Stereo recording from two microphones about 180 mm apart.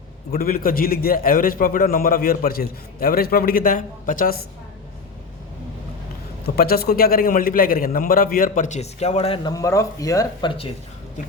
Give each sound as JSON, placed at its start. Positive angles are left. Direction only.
{"t": 0.3, "sound": "a man's voice", "side_deg": 55}
{"t": 6.4, "sound": "a man's voice", "side_deg": 60}